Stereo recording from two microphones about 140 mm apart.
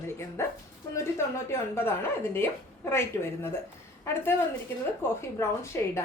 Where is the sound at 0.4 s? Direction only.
20° left (ahead or behind).